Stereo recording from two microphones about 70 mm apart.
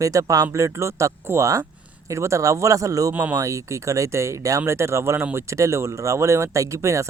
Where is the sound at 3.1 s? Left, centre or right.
Right.